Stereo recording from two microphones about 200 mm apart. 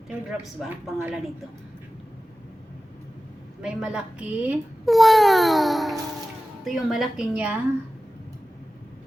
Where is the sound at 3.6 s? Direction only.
5° right (ahead or behind).